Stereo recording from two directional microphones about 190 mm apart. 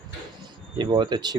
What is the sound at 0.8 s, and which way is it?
Speech, 25° right (ahead or behind).